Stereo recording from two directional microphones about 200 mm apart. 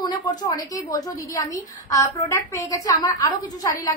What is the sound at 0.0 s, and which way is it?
A woman's voice, 20° left (ahead or behind).